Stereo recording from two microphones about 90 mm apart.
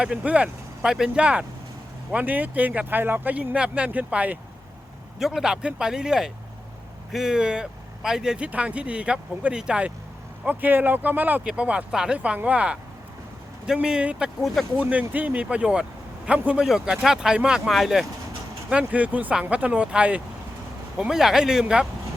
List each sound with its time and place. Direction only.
0.0 s speech: 10° right (ahead or behind)
5.2 s speech: 5° right (ahead or behind)
14.4 s speech: centre (ahead or behind)
14.8 s speech: 15° right (ahead or behind)